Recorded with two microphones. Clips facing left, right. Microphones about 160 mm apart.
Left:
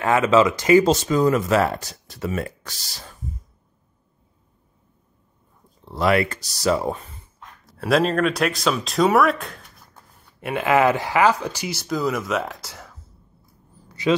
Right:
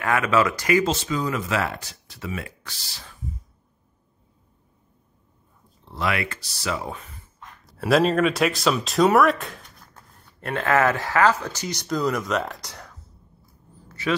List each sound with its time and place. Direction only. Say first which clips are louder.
0.0 s speech: left 4 dB; 25° left (ahead or behind)
0.8 s speech: left 7 dB; 40° left (ahead or behind)
5.9 s speech: left 7 dB; 40° left (ahead or behind)
7.6 s speech: even; centre (ahead or behind)
13.8 s vehicle: left 5 dB; 15° left (ahead or behind)